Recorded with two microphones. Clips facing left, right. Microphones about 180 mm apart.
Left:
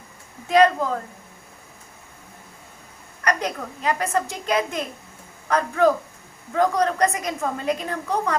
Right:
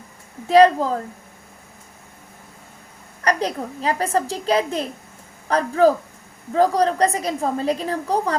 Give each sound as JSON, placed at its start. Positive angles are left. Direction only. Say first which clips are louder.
{"t": 0.4, "sound": "a woman's voice", "louder": "right 4 dB", "side_deg": -35}
{"t": 3.2, "sound": "a woman's voice", "louder": "right 3 dB", "side_deg": -35}